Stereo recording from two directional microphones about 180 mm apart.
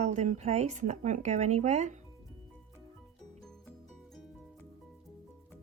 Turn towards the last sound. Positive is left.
turn(degrees=5)  # may be behind; listen again after turning